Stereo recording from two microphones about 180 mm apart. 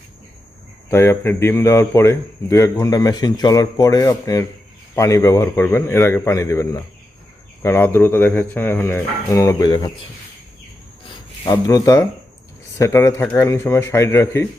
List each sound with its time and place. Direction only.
0.9 s a man's voice: 15° left (ahead or behind)
11.4 s a man's voice: 20° left (ahead or behind)